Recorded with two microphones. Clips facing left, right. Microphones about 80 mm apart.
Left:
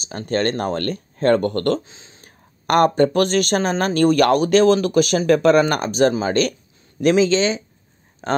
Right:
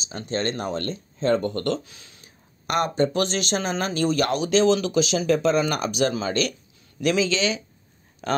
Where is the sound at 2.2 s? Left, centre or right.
Left.